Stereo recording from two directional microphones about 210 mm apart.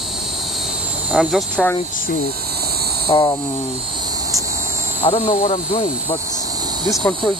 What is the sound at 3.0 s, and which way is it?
Insect, 25° left (ahead or behind).